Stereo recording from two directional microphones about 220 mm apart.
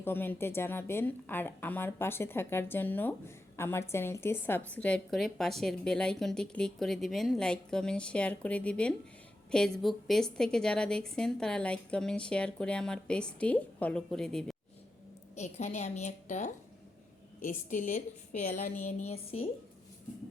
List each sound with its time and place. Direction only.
0.0 s a woman's voice: 10° left (ahead or behind)
15.4 s a woman's voice: 30° left (ahead or behind)